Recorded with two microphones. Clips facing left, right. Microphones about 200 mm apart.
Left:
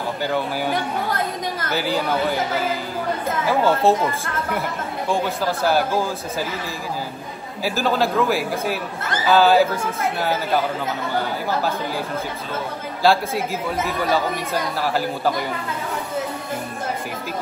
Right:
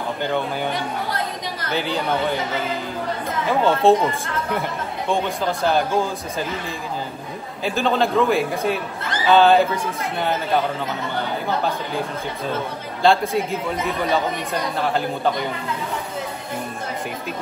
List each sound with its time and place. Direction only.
1.7 s speech: 5° left (ahead or behind)
3.4 s speech: 5° left (ahead or behind)
7.6 s speech: 5° left (ahead or behind)
13.0 s speech: 5° left (ahead or behind)